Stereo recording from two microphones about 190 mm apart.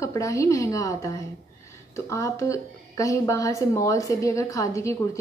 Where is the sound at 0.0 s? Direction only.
15° left (ahead or behind).